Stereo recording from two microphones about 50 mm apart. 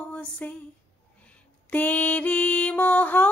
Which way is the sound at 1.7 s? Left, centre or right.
Left.